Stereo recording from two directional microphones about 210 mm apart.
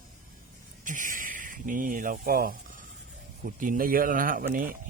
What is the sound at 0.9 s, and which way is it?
Speech, 40° right (ahead or behind).